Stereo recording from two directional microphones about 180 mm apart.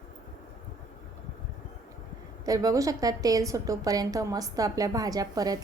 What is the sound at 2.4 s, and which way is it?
A woman's voice, 20° right (ahead or behind).